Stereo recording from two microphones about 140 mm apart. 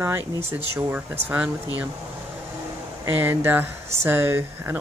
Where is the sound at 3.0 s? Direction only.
15° right (ahead or behind).